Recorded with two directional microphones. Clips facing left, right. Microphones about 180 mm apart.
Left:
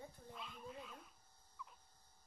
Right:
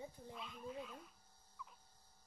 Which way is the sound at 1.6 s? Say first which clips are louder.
Even; centre (ahead or behind).